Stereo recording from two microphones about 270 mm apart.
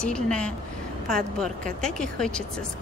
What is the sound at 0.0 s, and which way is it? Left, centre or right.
A woman's voice, centre.